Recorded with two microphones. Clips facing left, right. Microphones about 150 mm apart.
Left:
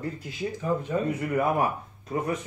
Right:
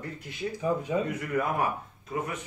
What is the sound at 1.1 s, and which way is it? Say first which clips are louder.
Speech: left 4 dB; 30° left (ahead or behind).